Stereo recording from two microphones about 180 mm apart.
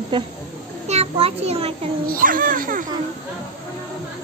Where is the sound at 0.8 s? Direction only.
35° right (ahead or behind).